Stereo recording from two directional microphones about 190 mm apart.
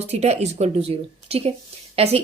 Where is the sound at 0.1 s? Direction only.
35° right (ahead or behind).